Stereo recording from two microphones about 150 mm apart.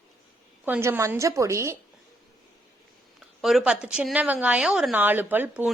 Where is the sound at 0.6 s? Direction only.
15° right (ahead or behind).